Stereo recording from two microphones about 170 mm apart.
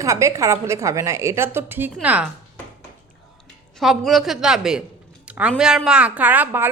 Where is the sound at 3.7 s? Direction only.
Centre (ahead or behind).